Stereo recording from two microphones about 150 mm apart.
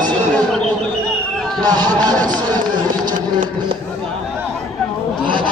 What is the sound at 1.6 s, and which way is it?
Speech, 25° right (ahead or behind).